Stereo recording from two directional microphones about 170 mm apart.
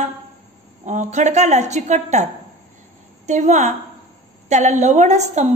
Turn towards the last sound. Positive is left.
turn(degrees=-45)  # may be behind; listen again after turning